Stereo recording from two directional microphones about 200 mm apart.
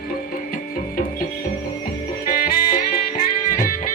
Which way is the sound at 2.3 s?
45° left (ahead or behind).